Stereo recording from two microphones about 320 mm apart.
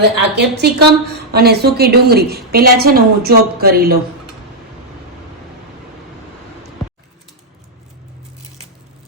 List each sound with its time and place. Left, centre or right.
0.2 s a woman's voice: right